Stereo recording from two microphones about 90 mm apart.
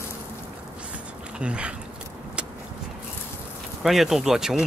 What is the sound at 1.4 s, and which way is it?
Speech, 10° right (ahead or behind).